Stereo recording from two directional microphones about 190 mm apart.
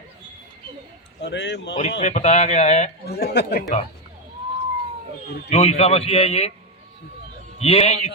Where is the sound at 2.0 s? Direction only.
35° left (ahead or behind).